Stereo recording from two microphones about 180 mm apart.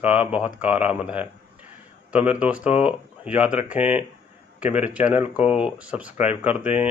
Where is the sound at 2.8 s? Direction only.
5° right (ahead or behind).